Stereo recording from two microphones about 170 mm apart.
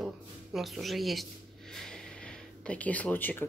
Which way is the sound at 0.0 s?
Centre (ahead or behind).